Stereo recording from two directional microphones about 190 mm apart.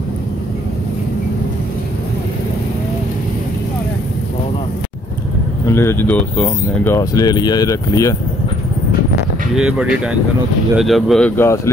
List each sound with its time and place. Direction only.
5.7 s speech: 15° left (ahead or behind)
9.6 s speech: 5° right (ahead or behind); by 11.7 s 15° left (ahead or behind)